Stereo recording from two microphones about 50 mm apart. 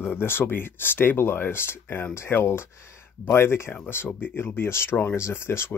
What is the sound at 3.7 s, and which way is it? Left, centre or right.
Speech, left.